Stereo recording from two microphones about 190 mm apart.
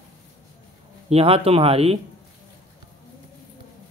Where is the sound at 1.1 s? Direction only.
30° right (ahead or behind).